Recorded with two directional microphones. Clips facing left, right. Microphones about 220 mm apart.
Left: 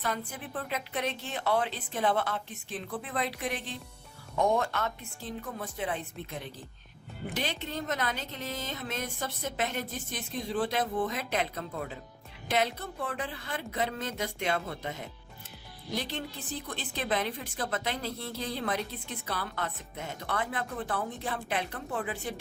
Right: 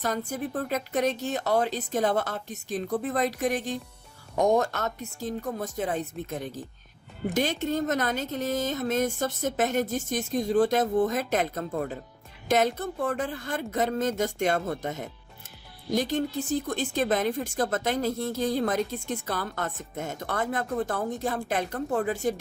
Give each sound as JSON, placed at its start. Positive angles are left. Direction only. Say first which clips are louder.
{"t": 0.0, "sound": "speech", "louder": "right 6 dB", "side_deg": -45}